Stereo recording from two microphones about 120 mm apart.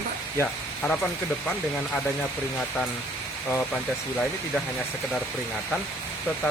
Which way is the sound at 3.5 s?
5° left (ahead or behind).